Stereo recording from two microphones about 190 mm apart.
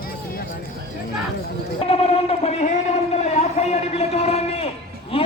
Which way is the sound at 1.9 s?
30° left (ahead or behind).